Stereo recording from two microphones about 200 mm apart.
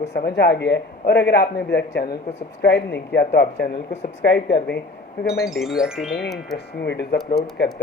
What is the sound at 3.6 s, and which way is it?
Speech, 35° left (ahead or behind).